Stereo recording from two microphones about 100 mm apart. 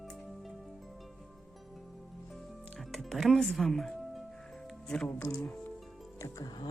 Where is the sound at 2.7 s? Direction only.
Centre (ahead or behind).